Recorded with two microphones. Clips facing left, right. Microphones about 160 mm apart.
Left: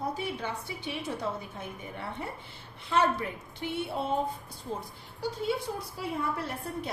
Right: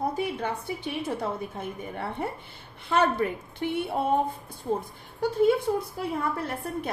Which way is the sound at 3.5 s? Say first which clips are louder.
Right 4 dB; 55° right (ahead or behind).